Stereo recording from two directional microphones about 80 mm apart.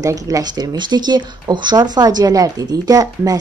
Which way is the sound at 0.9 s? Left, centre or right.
Right.